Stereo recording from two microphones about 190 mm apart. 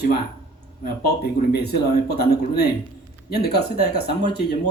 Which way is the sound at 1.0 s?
60° left (ahead or behind).